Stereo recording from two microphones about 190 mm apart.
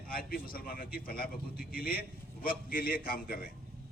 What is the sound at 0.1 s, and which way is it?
A man's voice, 50° left (ahead or behind).